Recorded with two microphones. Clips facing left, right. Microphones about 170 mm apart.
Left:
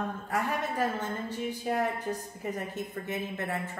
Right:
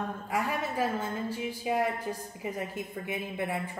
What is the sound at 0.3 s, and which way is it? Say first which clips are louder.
A woman's voice: even; 10° right (ahead or behind).